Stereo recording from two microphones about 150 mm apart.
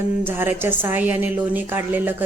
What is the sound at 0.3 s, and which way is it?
Speech, 15° right (ahead or behind).